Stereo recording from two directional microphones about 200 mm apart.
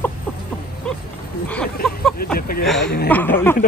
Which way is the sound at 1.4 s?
5° left (ahead or behind).